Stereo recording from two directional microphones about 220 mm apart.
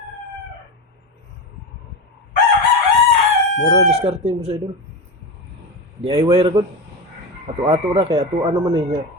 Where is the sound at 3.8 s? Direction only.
25° right (ahead or behind).